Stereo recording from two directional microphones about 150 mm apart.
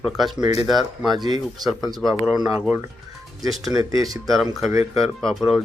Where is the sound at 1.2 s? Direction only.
25° right (ahead or behind).